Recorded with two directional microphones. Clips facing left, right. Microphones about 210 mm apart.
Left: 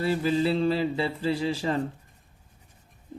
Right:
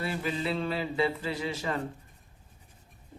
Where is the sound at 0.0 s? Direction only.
30° left (ahead or behind).